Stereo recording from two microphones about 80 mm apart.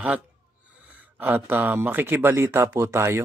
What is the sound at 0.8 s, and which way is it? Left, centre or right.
Speech, centre.